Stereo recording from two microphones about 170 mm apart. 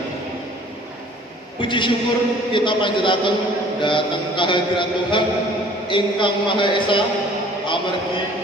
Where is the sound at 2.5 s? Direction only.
30° left (ahead or behind).